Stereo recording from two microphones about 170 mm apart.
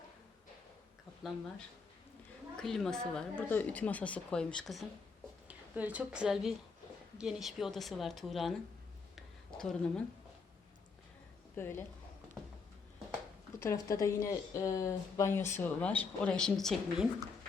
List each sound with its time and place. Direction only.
2.6 s a woman's voice: centre (ahead or behind)
9.6 s a woman's voice: 5° left (ahead or behind)
11.5 s speech: 15° left (ahead or behind)
13.6 s speech: 20° left (ahead or behind); by 17.1 s centre (ahead or behind)